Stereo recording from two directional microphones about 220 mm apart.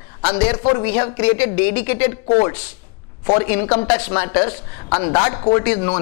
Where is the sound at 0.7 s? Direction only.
20° left (ahead or behind).